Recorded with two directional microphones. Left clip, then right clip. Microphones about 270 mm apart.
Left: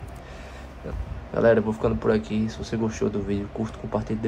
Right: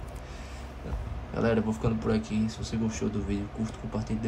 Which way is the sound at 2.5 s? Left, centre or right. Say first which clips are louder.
Left 5 dB; left.